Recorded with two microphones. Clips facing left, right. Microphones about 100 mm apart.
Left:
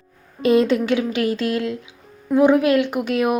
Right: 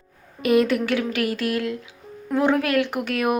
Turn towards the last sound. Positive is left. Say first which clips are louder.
# left 3 dB
turn(degrees=20)  # may be behind; listen again after turning